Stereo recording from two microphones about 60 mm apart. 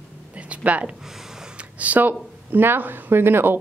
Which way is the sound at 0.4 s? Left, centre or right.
Right.